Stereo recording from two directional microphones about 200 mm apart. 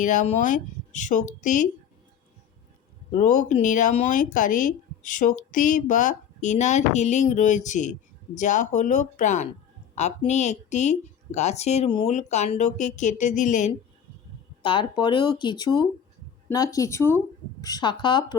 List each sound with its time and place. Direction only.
0.0 s speech: 40° left (ahead or behind)
3.1 s speech: 40° left (ahead or behind)
14.6 s speech: 25° left (ahead or behind)